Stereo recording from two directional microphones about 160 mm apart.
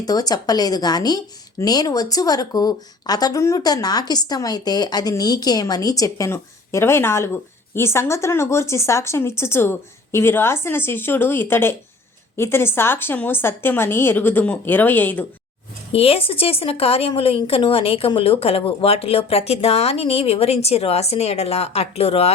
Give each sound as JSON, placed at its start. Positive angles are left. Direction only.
{"t": 0.0, "sound": "a woman's voice", "side_deg": 25}
{"t": 15.9, "sound": "a woman's voice", "side_deg": 35}